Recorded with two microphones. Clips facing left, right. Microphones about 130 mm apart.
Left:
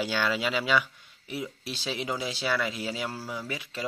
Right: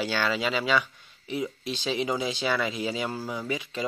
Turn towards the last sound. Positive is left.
turn(degrees=0)  # may be behind; listen again after turning